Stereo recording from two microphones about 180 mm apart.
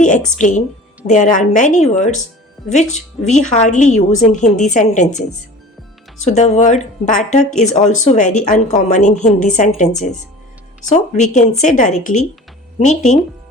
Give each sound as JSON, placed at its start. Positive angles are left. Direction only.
{"t": 0.0, "sound": "a woman's voice", "side_deg": 45}
{"t": 3.2, "sound": "speech", "side_deg": 40}
{"t": 6.2, "sound": "speech", "side_deg": 40}
{"t": 10.9, "sound": "speech", "side_deg": 40}